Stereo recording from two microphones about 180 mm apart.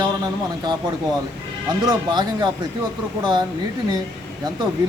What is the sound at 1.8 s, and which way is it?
Speech, 25° right (ahead or behind).